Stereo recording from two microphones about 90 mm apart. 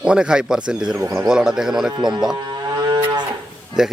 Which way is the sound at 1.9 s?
55° right (ahead or behind).